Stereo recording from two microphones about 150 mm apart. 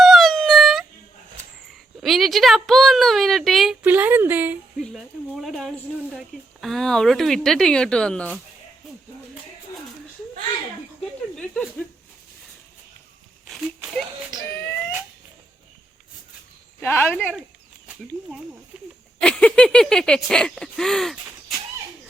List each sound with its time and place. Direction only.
0.0 s a sound: centre (ahead or behind)
2.0 s speech: centre (ahead or behind)
3.8 s a woman's voice: 10° right (ahead or behind)
4.8 s speech: centre (ahead or behind)
11.3 s speech: 5° left (ahead or behind)
13.5 s a sound: centre (ahead or behind)
16.8 s speech: 15° left (ahead or behind)
19.2 s speech: 5° left (ahead or behind)